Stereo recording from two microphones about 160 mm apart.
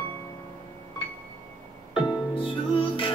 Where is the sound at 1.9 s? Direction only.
35° left (ahead or behind).